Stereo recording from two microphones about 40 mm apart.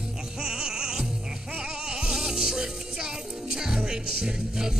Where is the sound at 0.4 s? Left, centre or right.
Centre.